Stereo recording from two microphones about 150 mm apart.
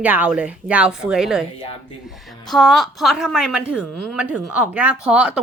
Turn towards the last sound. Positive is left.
turn(degrees=-5)  # may be behind; listen again after turning